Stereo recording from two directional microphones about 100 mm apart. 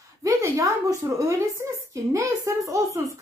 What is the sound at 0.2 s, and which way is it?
A woman's voice, 30° right (ahead or behind).